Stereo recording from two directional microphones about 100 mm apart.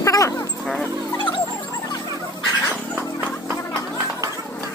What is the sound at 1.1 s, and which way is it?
Music, 50° left (ahead or behind).